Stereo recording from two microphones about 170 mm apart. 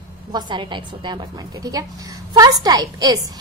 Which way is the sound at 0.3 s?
25° right (ahead or behind).